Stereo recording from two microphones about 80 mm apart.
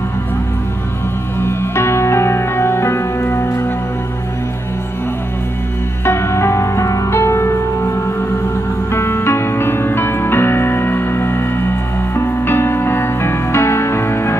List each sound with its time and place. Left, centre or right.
1.4 s music: left
6.0 s music: left
8.9 s music: left